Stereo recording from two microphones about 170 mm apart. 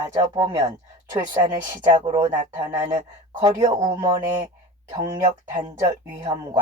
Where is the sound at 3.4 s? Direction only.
25° right (ahead or behind).